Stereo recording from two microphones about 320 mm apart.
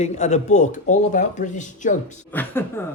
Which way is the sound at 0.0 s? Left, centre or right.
Left.